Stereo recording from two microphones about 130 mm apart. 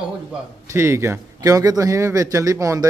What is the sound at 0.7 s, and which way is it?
Speech, 20° right (ahead or behind).